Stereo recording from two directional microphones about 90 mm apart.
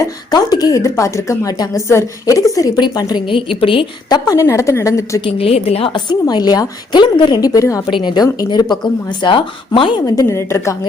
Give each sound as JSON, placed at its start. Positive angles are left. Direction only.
{"t": 0.3, "sound": "a woman's voice", "side_deg": 50}
{"t": 3.2, "sound": "a woman's voice", "side_deg": 75}
{"t": 4.1, "sound": "a woman's voice", "side_deg": 35}
{"t": 5.2, "sound": "a woman's voice", "side_deg": 90}
{"t": 6.1, "sound": "a woman's voice", "side_deg": 50}
{"t": 7.4, "sound": "a woman's voice", "side_deg": 40}
{"t": 7.9, "sound": "speech", "side_deg": 60}
{"t": 10.2, "sound": "a woman's voice", "side_deg": 30}